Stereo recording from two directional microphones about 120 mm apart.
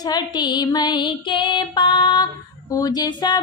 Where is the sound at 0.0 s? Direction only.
35° left (ahead or behind).